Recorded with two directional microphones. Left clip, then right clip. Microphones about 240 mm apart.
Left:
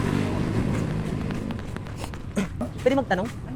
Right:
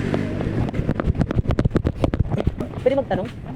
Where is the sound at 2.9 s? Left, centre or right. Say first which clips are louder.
Right 3 dB; left.